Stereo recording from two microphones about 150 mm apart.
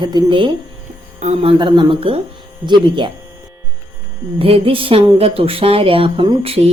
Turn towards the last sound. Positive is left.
turn(degrees=-40)  # may be behind; listen again after turning